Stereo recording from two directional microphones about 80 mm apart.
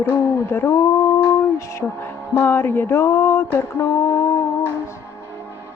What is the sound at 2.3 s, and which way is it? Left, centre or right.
Music, left.